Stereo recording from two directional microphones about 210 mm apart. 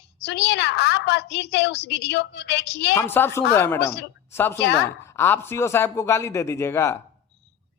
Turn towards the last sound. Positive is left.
turn(degrees=10)  # may be behind; listen again after turning